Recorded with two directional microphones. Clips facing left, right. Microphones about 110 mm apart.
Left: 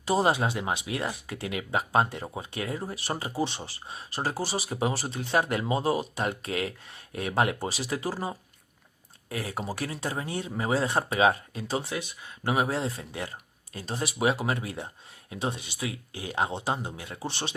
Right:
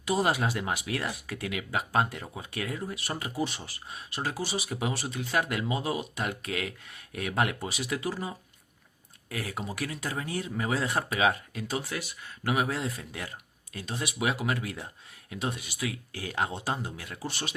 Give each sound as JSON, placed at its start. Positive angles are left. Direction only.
{"t": 0.0, "sound": "speech", "side_deg": 30}